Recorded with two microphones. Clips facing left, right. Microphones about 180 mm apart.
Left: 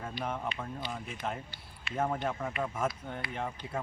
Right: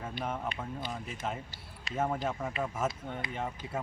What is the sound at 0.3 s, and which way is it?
Speech, 5° right (ahead or behind).